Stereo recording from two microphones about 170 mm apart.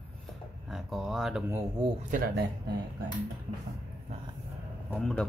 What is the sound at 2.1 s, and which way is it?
Speech, 65° right (ahead or behind).